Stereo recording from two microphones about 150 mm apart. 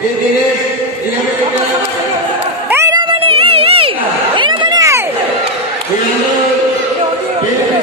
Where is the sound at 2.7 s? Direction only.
15° right (ahead or behind).